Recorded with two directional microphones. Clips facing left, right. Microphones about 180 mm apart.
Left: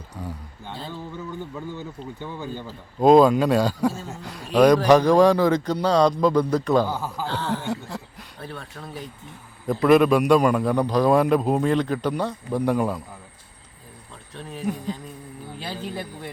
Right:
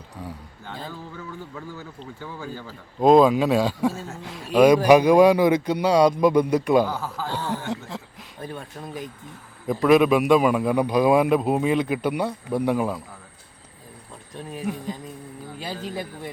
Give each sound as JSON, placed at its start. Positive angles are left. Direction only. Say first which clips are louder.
{"t": 0.2, "sound": "a man's voice", "louder": "left 2 dB", "side_deg": 0}
{"t": 1.5, "sound": "speech", "louder": "left 4 dB", "side_deg": 20}
{"t": 3.0, "sound": "a man's voice", "louder": "left 1 dB", "side_deg": 0}
{"t": 6.8, "sound": "speech", "louder": "left 1 dB", "side_deg": 15}
{"t": 7.5, "sound": "a man's voice", "louder": "left 1 dB", "side_deg": 0}
{"t": 8.4, "sound": "speech", "louder": "right 2 dB", "side_deg": -15}
{"t": 9.6, "sound": "a man's voice", "louder": "left 1 dB", "side_deg": 0}
{"t": 14.3, "sound": "speech", "louder": "left 1 dB", "side_deg": -10}